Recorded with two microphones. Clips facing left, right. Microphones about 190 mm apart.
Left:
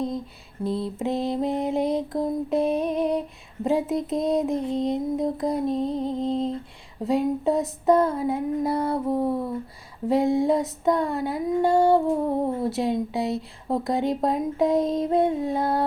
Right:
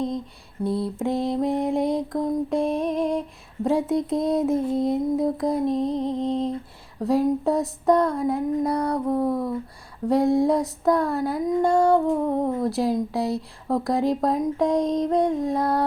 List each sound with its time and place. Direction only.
0.6 s mantra: centre (ahead or behind)